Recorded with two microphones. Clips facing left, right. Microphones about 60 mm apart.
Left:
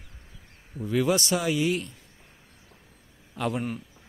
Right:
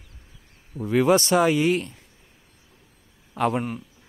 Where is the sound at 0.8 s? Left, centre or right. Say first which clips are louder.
Right 5 dB; right.